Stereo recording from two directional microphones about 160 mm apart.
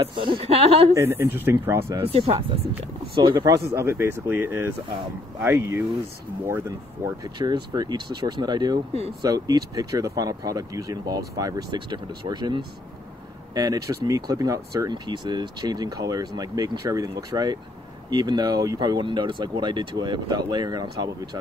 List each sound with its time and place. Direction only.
0.0 s speech: 30° right (ahead or behind)
0.9 s speech: 15° right (ahead or behind)
2.0 s speech: 35° right (ahead or behind)
3.3 s speech: 20° right (ahead or behind)
7.1 s speech: 25° right (ahead or behind)